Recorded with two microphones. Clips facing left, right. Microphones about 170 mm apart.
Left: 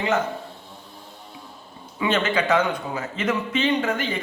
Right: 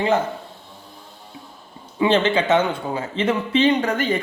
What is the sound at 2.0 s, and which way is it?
A man's voice, 30° right (ahead or behind).